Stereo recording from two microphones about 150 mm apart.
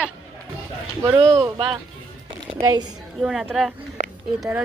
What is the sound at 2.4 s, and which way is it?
Speech, 30° right (ahead or behind).